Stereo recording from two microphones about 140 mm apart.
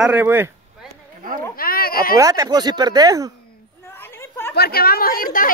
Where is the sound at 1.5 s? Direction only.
90° left.